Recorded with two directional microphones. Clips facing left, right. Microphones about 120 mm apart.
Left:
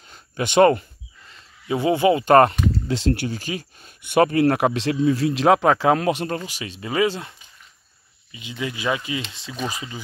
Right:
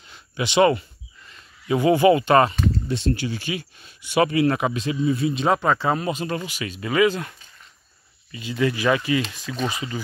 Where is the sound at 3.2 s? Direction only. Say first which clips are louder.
Even; 40° left (ahead or behind).